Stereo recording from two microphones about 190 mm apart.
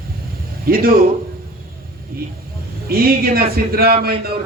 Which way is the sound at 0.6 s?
50° right (ahead or behind).